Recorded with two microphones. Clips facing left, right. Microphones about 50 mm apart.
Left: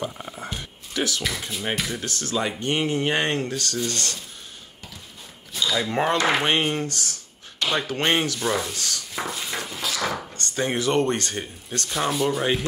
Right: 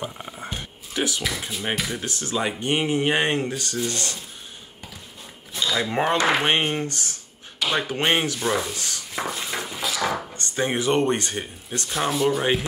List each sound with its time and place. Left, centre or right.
0.0 s a sound: centre
0.9 s speech: centre
1.2 s speech: centre
5.7 s speech: centre
6.4 s speech: centre
7.5 s a sound: centre
7.8 s speech: centre
8.7 s speech: right
9.2 s a sound: centre
10.3 s speech: centre
11.9 s speech: centre